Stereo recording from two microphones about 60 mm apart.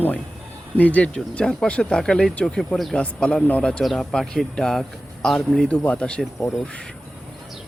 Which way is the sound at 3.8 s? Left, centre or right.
Centre.